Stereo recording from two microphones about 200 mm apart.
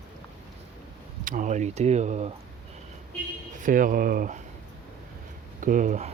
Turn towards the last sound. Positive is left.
turn(degrees=-35)  # may be behind; listen again after turning